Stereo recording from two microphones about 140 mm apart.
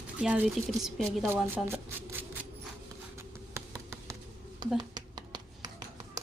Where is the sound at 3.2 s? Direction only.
20° right (ahead or behind).